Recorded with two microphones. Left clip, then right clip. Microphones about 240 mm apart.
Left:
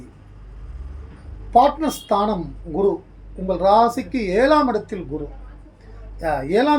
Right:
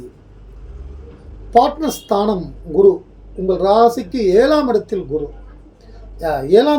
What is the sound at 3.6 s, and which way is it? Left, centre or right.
Speech, centre.